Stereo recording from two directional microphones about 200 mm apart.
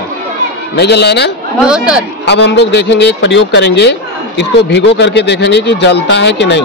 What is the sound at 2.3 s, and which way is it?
A man's voice, 60° left (ahead or behind).